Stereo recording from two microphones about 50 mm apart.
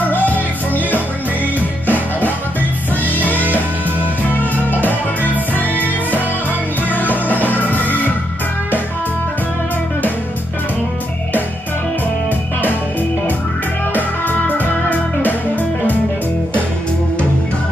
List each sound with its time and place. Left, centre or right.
0.0 s music: left
4.3 s music: left
6.9 s music: left
13.9 s music: left